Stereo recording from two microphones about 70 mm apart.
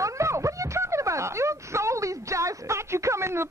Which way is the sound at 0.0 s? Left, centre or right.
Right.